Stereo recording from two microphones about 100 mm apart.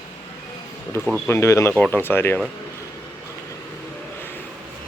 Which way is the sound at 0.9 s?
25° left (ahead or behind).